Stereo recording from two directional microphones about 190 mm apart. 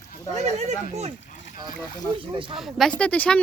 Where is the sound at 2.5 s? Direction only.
Centre (ahead or behind).